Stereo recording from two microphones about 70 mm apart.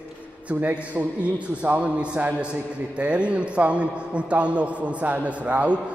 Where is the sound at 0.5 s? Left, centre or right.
Right.